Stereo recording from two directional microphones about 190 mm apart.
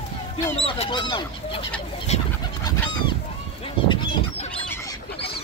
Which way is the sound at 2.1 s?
35° left (ahead or behind).